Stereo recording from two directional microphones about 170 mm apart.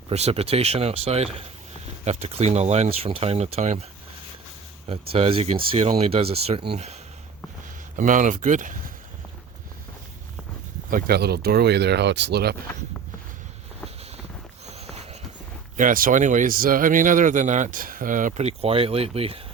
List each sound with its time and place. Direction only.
0.1 s speech: 40° right (ahead or behind)
4.9 s speech: 35° right (ahead or behind)
10.8 s speech: 55° right (ahead or behind); by 12.5 s 70° right (ahead or behind)
14.7 s walk: 40° right (ahead or behind)
15.8 s speech: 55° right (ahead or behind); by 19.4 s 35° right (ahead or behind)